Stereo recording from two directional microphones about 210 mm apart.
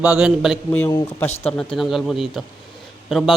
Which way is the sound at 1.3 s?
30° left (ahead or behind).